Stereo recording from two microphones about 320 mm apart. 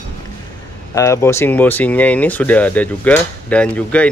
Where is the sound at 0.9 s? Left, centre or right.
Centre.